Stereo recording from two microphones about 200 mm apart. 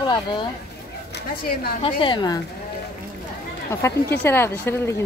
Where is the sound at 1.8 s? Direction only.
25° left (ahead or behind).